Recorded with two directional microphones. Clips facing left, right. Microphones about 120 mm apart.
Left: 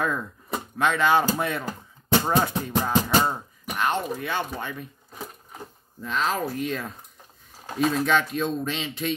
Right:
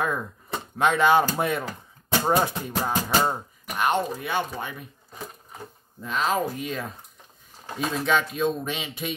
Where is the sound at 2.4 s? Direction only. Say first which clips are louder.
Left 1 dB; 15° right (ahead or behind).